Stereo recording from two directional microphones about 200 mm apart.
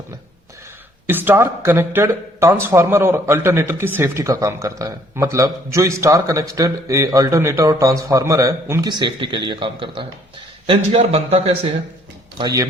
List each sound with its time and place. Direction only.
1.0 s a man's voice: 10° right (ahead or behind); by 11.7 s 30° right (ahead or behind)
12.4 s speech: 20° right (ahead or behind)